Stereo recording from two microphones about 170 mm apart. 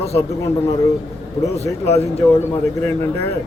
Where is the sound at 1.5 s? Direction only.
35° left (ahead or behind).